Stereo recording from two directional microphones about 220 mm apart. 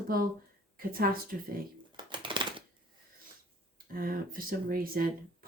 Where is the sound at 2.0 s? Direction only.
20° right (ahead or behind).